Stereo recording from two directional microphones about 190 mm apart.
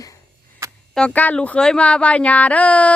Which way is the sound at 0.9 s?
5° left (ahead or behind).